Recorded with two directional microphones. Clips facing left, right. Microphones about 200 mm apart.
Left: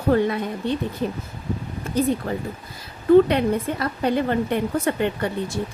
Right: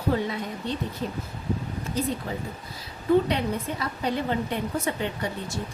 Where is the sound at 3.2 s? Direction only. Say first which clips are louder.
Left 6 dB; 60° left (ahead or behind).